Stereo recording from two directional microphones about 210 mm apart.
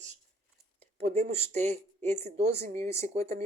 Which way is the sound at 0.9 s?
30° right (ahead or behind).